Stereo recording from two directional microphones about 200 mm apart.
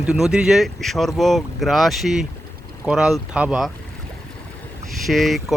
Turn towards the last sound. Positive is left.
turn(degrees=0)  # may be behind; listen again after turning